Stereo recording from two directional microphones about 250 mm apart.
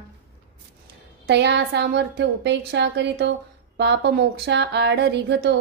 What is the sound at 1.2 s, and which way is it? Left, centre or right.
A woman's voice, right.